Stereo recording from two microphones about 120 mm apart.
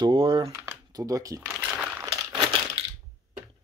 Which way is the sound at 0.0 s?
45° right (ahead or behind).